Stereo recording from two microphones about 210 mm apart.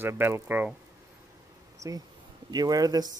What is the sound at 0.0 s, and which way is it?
Speech, 10° right (ahead or behind).